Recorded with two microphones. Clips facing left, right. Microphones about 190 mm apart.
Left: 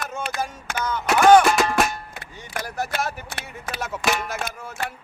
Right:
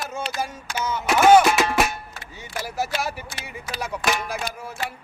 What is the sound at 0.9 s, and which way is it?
Music, 10° right (ahead or behind).